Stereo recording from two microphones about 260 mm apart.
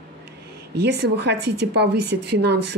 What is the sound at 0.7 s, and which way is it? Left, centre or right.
A woman's voice, right.